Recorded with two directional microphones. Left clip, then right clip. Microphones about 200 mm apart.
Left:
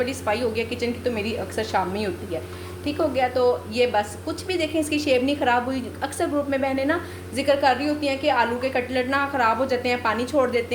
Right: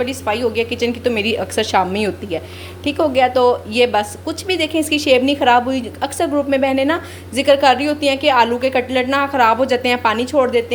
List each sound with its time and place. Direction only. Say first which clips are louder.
0.0 s a woman's voice: right 5 dB; 30° right (ahead or behind)